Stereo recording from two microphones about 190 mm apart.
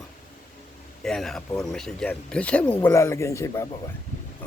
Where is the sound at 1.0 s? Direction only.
Centre (ahead or behind).